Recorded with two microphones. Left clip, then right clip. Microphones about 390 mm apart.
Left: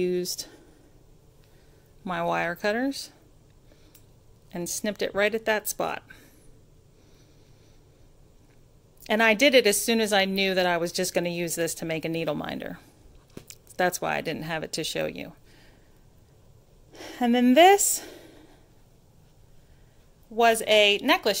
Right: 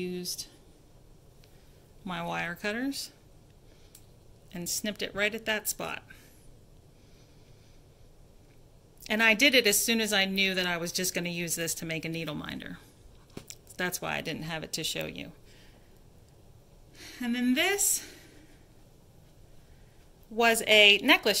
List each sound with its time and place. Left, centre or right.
0.0 s speech: centre
2.0 s a woman's voice: centre
4.5 s a woman's voice: centre
9.0 s a woman's voice: centre
16.9 s speech: centre
20.3 s speech: centre